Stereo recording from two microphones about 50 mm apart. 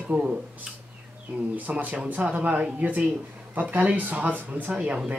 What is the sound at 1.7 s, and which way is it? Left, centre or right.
Speech, right.